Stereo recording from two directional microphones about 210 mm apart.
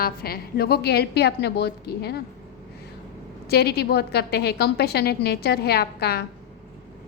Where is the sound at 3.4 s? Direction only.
50° left (ahead or behind).